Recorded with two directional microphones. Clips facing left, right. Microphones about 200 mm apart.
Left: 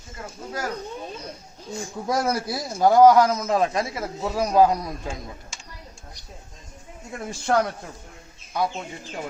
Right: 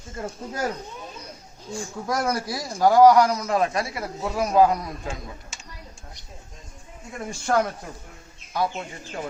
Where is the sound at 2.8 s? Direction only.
20° left (ahead or behind).